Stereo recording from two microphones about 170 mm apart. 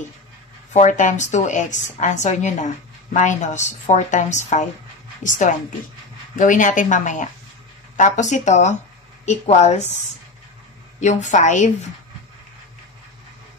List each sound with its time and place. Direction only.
0.7 s a woman's voice: 45° left (ahead or behind)
11.0 s a woman's voice: 45° left (ahead or behind)